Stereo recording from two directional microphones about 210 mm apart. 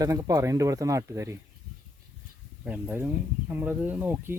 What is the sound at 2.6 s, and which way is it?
Speech, 5° right (ahead or behind).